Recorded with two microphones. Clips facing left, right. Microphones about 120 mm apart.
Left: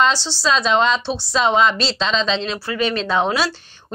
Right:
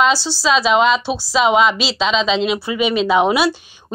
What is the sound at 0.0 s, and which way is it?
A woman's voice, 10° right (ahead or behind).